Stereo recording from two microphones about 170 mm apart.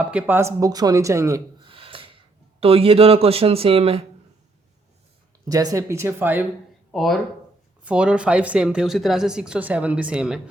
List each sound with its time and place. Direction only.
0.0 s speech: 5° right (ahead or behind)
1.6 s gasp: 30° right (ahead or behind)
2.6 s speech: 35° right (ahead or behind)
5.5 s speech: 20° right (ahead or behind)
6.9 s speech: centre (ahead or behind)